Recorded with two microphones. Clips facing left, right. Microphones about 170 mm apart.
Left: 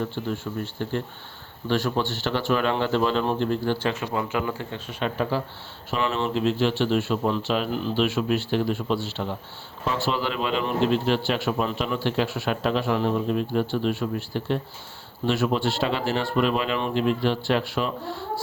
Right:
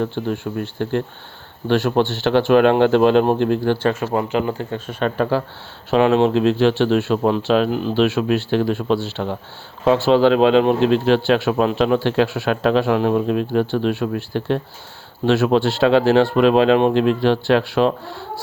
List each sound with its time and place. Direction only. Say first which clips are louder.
0.2 s speech: right 6 dB; 65° right (ahead or behind)
4.0 s speech: right 7 dB; 40° right (ahead or behind)
4.7 s speech: right 7 dB; 55° right (ahead or behind); by 7.2 s 80° right
7.2 s speech: right 8 dB; 65° right (ahead or behind)
9.8 s a man's voice: right 12 dB; 85° right